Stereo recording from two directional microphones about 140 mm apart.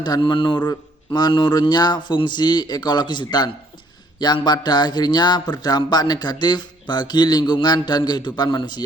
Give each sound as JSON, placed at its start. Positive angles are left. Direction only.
{"t": 0.0, "sound": "a man's voice", "side_deg": 30}